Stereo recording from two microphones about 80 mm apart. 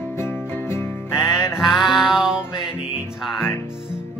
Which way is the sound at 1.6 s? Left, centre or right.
Centre.